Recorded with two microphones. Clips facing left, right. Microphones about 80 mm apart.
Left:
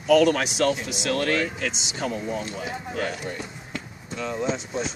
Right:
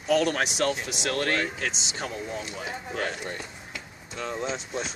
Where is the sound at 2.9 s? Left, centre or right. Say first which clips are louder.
Left 2 dB; right.